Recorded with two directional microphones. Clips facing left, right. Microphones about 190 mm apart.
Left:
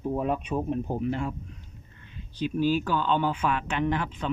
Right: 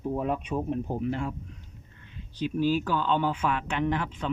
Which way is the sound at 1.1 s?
20° left (ahead or behind).